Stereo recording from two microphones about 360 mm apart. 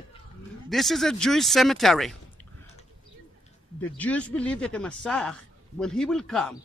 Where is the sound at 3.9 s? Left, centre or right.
Centre.